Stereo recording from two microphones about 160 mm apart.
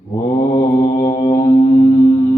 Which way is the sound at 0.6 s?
25° left (ahead or behind).